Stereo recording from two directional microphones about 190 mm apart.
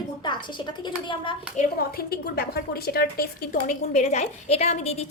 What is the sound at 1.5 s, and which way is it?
A woman's voice, 50° left (ahead or behind).